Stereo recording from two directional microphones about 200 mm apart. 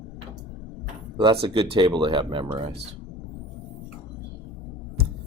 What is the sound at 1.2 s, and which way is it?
Speech, 25° right (ahead or behind).